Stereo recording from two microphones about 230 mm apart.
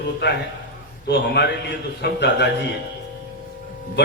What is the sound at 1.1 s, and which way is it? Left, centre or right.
A man's voice, left.